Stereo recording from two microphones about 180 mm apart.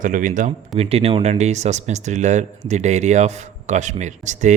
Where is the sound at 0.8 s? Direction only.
35° right (ahead or behind).